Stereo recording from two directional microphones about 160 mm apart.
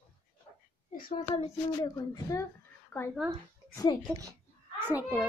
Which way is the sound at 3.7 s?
25° left (ahead or behind).